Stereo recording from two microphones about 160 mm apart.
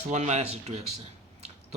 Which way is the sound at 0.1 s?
45° right (ahead or behind).